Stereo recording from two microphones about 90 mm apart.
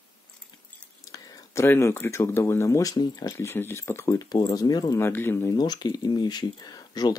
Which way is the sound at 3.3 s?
25° left (ahead or behind).